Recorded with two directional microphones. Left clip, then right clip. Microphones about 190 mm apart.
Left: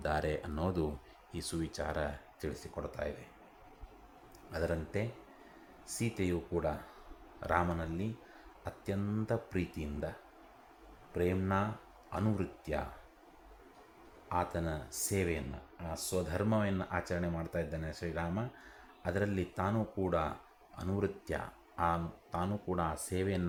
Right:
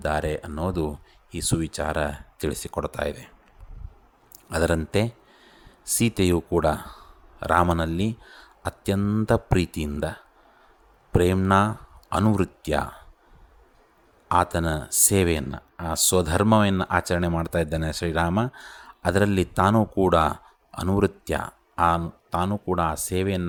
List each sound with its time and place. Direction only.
0.0 s speech: 25° right (ahead or behind); by 3.1 s 45° right (ahead or behind)
4.5 s speech: 45° right (ahead or behind)
11.2 s speech: 45° right (ahead or behind)
14.5 s speech: 40° right (ahead or behind)